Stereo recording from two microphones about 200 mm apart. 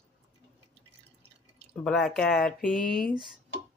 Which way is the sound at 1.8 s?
Centre (ahead or behind).